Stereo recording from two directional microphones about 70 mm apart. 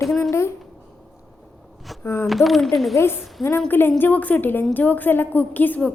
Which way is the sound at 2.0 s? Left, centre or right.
Left.